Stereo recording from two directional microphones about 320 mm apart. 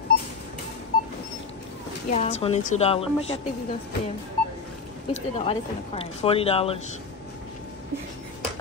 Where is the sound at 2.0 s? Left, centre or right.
Left.